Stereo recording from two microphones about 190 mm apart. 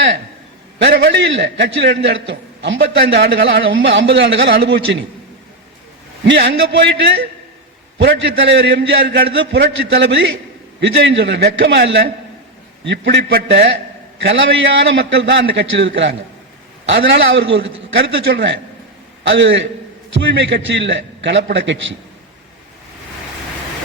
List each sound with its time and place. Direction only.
0.8 s a man's voice: 65° right (ahead or behind)
6.2 s a man's voice: 65° right (ahead or behind)
14.2 s a man's voice: 75° right (ahead or behind)